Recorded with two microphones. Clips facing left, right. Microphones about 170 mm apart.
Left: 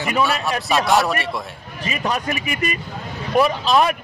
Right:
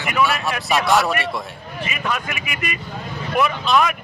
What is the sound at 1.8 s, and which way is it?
Speech, 35° left (ahead or behind).